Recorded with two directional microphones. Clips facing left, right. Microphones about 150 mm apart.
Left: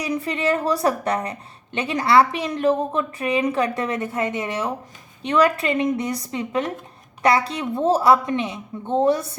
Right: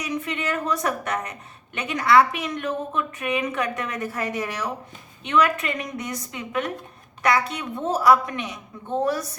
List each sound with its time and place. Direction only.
0.0 s a woman's voice: 35° left (ahead or behind)